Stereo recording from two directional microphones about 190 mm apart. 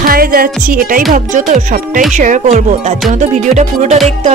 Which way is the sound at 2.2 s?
40° right (ahead or behind).